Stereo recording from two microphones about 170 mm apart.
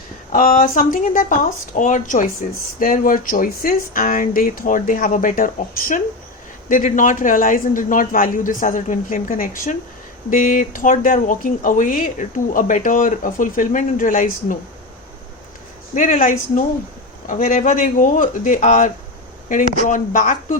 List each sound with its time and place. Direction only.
0.3 s speech: 55° left (ahead or behind)
16.0 s speech: 55° left (ahead or behind)
19.9 s speech: 50° left (ahead or behind)